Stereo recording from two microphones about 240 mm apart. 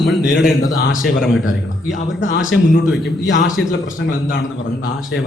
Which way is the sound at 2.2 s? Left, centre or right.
Left.